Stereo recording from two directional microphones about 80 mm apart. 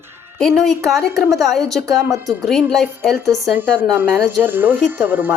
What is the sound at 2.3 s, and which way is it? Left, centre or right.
Speech, centre.